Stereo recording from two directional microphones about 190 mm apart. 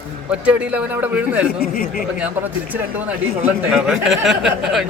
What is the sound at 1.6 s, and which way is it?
Speech, 50° left (ahead or behind).